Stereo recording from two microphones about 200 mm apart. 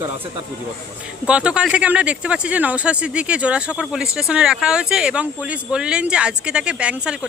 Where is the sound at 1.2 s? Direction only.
5° right (ahead or behind).